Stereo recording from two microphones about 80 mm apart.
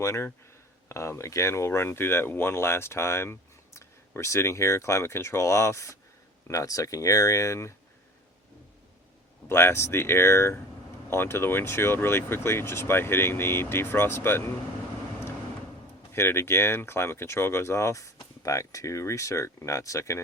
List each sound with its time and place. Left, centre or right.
0.0 s speech: left
9.5 s speech: left
16.1 s speech: left